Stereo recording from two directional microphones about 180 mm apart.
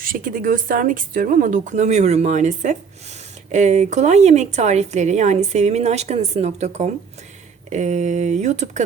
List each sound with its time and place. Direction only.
0.0 s speech: 50° right (ahead or behind)